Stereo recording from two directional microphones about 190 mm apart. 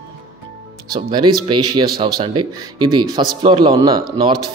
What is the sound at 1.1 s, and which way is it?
Speech, 25° right (ahead or behind).